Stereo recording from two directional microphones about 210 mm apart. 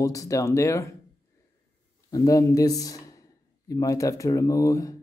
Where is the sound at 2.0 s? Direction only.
15° left (ahead or behind).